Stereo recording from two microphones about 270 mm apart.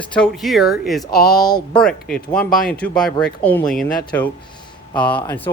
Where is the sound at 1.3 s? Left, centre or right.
Centre.